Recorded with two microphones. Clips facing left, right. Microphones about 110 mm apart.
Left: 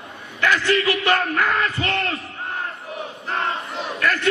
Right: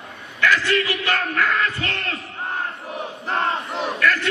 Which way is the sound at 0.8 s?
30° left (ahead or behind).